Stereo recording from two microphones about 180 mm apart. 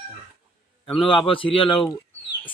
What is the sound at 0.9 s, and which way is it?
Speech, 30° left (ahead or behind).